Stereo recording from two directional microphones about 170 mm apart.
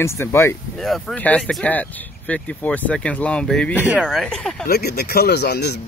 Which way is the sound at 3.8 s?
5° right (ahead or behind).